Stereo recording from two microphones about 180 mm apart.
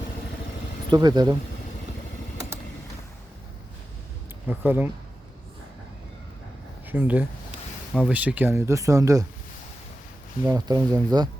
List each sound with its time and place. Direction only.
0.9 s speech: 25° right (ahead or behind)
4.4 s speech: 10° right (ahead or behind)
6.8 s speech: 10° right (ahead or behind)
10.4 s speech: 20° right (ahead or behind)